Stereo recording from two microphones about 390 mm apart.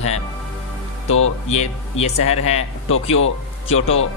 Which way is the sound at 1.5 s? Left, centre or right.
Centre.